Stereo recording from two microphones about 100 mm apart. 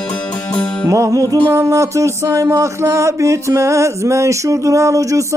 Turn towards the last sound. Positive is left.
turn(degrees=-35)  # may be behind; listen again after turning